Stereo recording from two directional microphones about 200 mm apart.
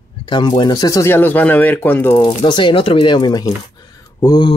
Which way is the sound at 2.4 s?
25° left (ahead or behind).